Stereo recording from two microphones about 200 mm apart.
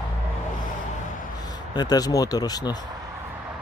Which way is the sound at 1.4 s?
20° left (ahead or behind).